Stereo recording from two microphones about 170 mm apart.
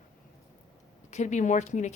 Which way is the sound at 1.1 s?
45° left (ahead or behind).